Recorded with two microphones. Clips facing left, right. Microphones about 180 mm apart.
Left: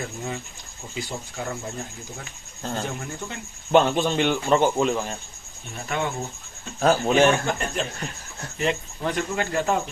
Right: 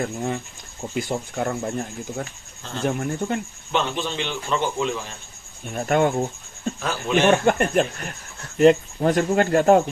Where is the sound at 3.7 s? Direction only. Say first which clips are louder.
Left 6 dB; 50° left (ahead or behind).